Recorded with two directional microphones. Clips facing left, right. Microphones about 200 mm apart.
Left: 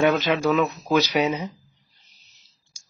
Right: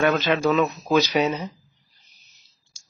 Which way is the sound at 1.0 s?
10° left (ahead or behind).